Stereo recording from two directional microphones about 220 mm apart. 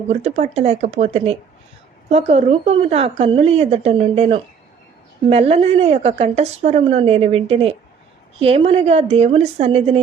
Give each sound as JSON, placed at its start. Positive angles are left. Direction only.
{"t": 0.1, "sound": "a woman's voice", "side_deg": -30}